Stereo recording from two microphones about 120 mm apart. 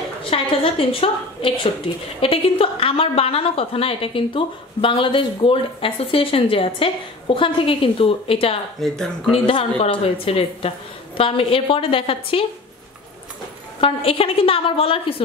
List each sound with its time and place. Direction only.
0.3 s a woman's voice: 50° left (ahead or behind)
8.7 s speech: centre (ahead or behind)
9.3 s a woman's voice: 50° left (ahead or behind)
13.7 s a woman's voice: 50° left (ahead or behind)